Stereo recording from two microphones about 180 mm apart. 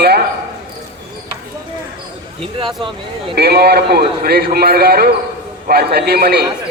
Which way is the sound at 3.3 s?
60° right (ahead or behind).